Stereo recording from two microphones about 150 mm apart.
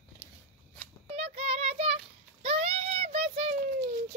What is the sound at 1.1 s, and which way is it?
Child singing, 40° right (ahead or behind).